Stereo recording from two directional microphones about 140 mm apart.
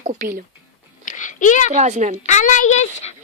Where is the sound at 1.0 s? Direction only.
65° left (ahead or behind).